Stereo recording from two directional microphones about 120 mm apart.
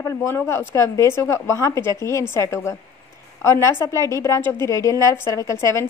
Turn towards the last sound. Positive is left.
turn(degrees=25)  # may be behind; listen again after turning